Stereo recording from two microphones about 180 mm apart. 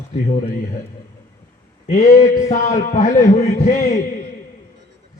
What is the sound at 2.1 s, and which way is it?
A man's voice, 40° left (ahead or behind).